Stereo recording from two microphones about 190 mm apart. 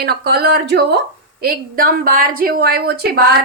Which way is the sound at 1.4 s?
50° right (ahead or behind).